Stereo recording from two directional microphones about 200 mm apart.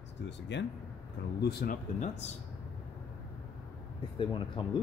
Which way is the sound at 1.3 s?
55° left (ahead or behind).